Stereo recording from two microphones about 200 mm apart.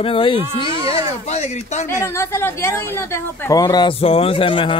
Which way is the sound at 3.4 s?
20° left (ahead or behind).